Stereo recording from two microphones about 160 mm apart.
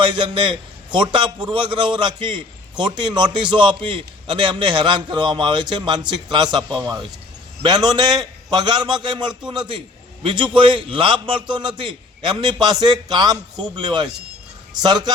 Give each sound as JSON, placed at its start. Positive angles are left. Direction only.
{"t": 0.0, "sound": "a man's voice", "side_deg": -30}